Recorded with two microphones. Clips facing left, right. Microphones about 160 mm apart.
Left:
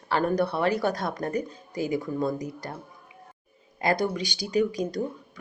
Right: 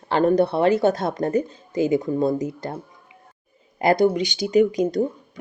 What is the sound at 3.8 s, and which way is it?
Speech, 25° right (ahead or behind).